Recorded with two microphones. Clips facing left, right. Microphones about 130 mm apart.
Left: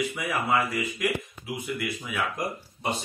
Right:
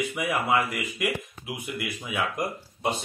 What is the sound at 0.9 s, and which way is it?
Speech, 15° right (ahead or behind).